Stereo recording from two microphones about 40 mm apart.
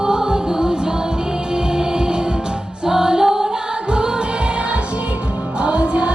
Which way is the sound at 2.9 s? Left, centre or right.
Centre.